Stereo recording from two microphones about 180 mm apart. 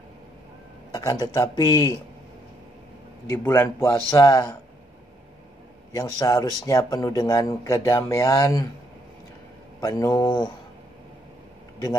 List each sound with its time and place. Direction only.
0.9 s speech: 20° left (ahead or behind)
3.3 s a man's voice: 10° left (ahead or behind)
5.9 s speech: 20° left (ahead or behind)
9.8 s speech: 20° left (ahead or behind)